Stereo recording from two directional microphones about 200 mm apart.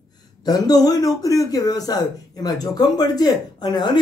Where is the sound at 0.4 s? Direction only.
20° left (ahead or behind).